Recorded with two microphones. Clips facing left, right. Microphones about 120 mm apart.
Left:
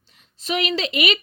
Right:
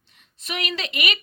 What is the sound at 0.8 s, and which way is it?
Speech, 35° left (ahead or behind).